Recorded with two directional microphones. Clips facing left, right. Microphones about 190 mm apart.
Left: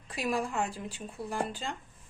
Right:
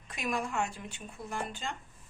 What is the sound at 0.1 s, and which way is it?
Speech, 35° left (ahead or behind).